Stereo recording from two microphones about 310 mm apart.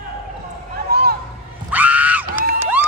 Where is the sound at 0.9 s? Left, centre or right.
Right.